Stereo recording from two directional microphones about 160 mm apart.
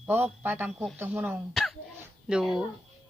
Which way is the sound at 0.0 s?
10° right (ahead or behind).